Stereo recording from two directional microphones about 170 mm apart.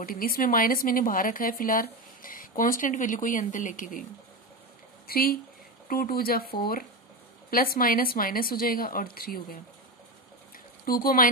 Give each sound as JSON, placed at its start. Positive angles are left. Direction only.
{"t": 0.0, "sound": "speech", "side_deg": 55}
{"t": 5.0, "sound": "speech", "side_deg": 60}
{"t": 10.9, "sound": "speech", "side_deg": 60}